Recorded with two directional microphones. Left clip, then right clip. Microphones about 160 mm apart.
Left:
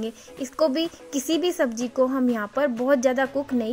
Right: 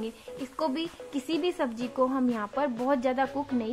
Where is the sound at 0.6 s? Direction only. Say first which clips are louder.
Left 8 dB; 25° left (ahead or behind).